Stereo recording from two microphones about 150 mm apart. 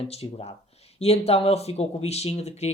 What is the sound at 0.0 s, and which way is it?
Speech, 40° left (ahead or behind).